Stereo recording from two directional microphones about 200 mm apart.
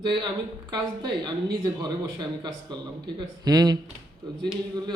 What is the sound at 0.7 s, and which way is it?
A man's voice, 20° right (ahead or behind).